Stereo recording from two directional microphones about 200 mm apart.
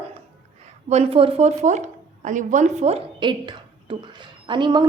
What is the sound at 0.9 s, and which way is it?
A woman's voice, 30° right (ahead or behind).